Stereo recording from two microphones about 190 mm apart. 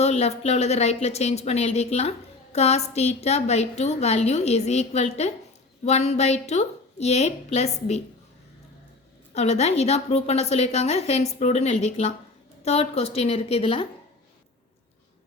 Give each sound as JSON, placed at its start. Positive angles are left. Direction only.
{"t": 0.0, "sound": "a woman's voice", "side_deg": 35}
{"t": 9.3, "sound": "a woman's voice", "side_deg": 35}